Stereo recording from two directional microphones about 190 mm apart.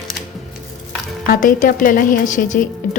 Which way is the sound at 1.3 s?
45° left (ahead or behind).